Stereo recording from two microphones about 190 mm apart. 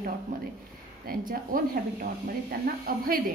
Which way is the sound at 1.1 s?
50° right (ahead or behind).